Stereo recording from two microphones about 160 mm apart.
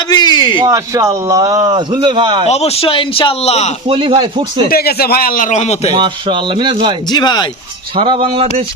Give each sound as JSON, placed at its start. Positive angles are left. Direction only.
{"t": 0.1, "sound": "a man's voice", "side_deg": 25}
{"t": 0.6, "sound": "a man's voice", "side_deg": -20}
{"t": 2.5, "sound": "speech", "side_deg": 40}
{"t": 3.8, "sound": "speech", "side_deg": -35}
{"t": 4.7, "sound": "a man's voice", "side_deg": 75}
{"t": 5.9, "sound": "a man's voice", "side_deg": -30}
{"t": 7.1, "sound": "speech", "side_deg": 25}
{"t": 7.9, "sound": "speech", "side_deg": -35}